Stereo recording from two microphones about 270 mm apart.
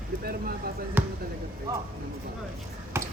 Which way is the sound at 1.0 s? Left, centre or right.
Centre.